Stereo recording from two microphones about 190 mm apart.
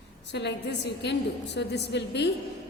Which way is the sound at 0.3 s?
65° left (ahead or behind).